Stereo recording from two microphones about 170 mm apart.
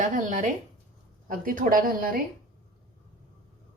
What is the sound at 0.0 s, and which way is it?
A woman's voice, 45° right (ahead or behind).